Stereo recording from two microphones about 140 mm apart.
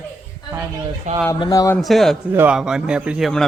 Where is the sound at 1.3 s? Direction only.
30° left (ahead or behind).